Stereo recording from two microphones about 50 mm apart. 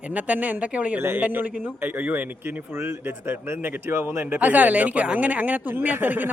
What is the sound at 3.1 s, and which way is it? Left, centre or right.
Speech, right.